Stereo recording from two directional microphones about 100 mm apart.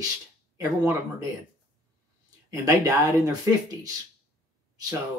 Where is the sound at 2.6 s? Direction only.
35° right (ahead or behind).